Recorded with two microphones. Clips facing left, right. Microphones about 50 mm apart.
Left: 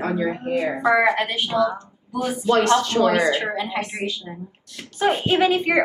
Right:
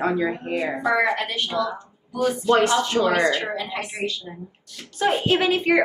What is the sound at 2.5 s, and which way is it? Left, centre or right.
Speech, centre.